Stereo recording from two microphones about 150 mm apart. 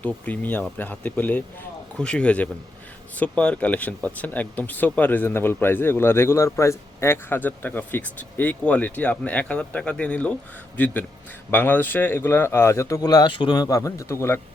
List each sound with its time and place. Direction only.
0.0 s speech: 10° left (ahead or behind)